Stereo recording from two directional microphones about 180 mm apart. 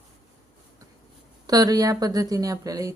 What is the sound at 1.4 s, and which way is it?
A woman's voice, 20° right (ahead or behind).